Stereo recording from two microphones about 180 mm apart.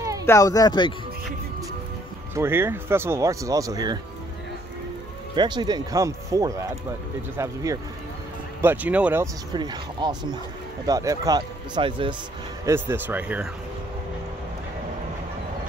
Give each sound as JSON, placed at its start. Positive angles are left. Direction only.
{"t": 0.2, "sound": "speech", "side_deg": 15}
{"t": 2.3, "sound": "speech", "side_deg": -15}
{"t": 5.3, "sound": "speech", "side_deg": -25}
{"t": 12.6, "sound": "speech", "side_deg": -10}